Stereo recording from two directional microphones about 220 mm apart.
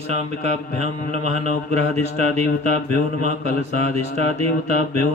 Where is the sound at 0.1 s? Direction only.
30° right (ahead or behind).